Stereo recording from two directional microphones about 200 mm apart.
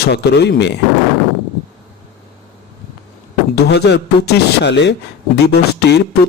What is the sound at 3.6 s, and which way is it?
Speech, 55° left (ahead or behind).